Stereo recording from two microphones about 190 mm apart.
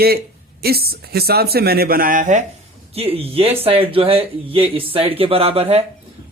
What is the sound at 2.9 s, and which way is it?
Speech, 30° right (ahead or behind).